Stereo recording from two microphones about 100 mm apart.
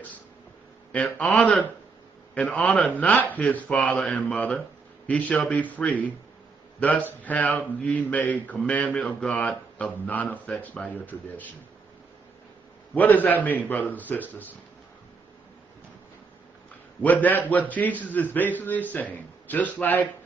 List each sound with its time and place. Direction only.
0.9 s speech: 15° left (ahead or behind)
3.2 s speech: 15° left (ahead or behind)
12.9 s speech: 15° left (ahead or behind)
17.0 s speech: 15° left (ahead or behind)